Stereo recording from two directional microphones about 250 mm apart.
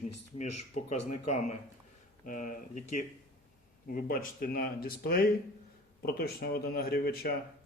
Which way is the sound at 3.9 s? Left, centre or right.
Left.